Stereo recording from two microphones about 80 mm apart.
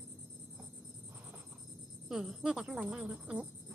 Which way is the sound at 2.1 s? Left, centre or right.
Centre.